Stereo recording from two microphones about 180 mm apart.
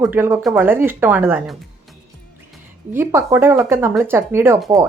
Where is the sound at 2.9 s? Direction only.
15° right (ahead or behind).